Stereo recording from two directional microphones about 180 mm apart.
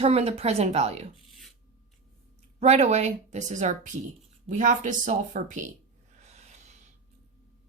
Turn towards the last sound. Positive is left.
turn(degrees=-40)  # may be behind; listen again after turning